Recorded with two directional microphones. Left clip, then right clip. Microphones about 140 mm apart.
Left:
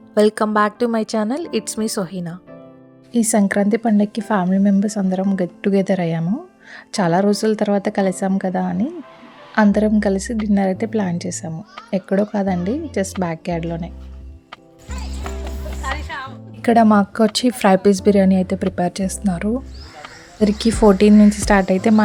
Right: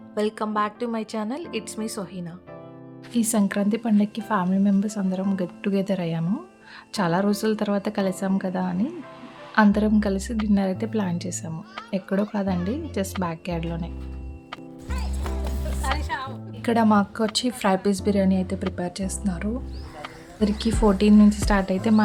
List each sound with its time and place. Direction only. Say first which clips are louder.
0.1 s a woman's voice: left 10 dB; 40° left (ahead or behind)
3.1 s a woman's voice: left 7 dB; 30° left (ahead or behind)
14.5 s music: even; centre (ahead or behind)
16.1 s music: left 1 dB; 80° right
16.6 s a woman's voice: left 7 dB; 35° left (ahead or behind)